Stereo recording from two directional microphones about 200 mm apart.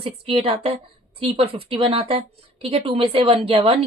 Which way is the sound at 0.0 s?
30° right (ahead or behind).